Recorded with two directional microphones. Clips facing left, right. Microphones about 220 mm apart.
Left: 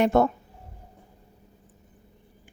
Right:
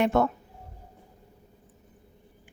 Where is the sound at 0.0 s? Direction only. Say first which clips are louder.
Left 3 dB; 35° left (ahead or behind).